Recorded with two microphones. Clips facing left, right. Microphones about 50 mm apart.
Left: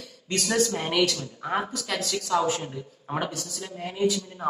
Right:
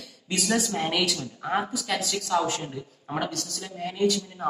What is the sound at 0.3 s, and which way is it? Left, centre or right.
A man's voice, centre.